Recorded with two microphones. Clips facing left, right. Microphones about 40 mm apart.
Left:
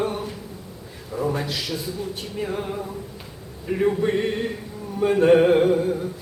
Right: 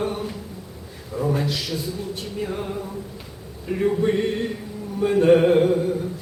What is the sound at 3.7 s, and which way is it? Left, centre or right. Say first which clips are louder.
Carnatic music: even; centre.